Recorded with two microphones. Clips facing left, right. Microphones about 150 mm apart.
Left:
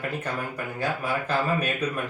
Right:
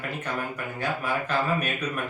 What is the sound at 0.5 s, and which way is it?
Speech, 35° left (ahead or behind).